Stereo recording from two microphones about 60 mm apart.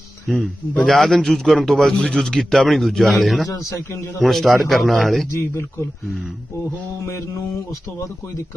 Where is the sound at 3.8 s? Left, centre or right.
Left.